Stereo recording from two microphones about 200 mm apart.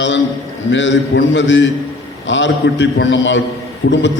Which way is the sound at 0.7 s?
65° left (ahead or behind).